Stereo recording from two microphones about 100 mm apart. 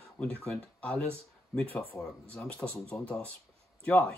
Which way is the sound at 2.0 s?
35° left (ahead or behind).